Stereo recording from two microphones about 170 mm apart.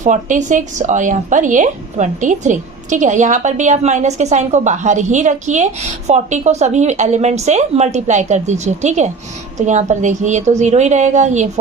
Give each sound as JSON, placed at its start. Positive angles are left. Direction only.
{"t": 0.0, "sound": "speech", "side_deg": -45}